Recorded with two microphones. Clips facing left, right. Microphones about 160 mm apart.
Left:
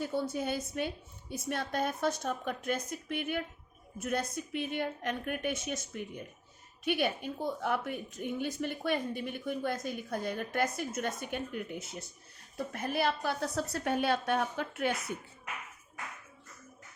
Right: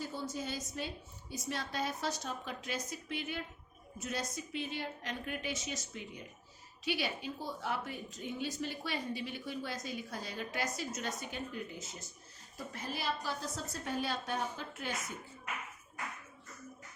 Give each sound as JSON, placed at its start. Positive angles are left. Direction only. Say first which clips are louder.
{"t": 0.0, "sound": "a woman's voice", "louder": "left 7 dB", "side_deg": 60}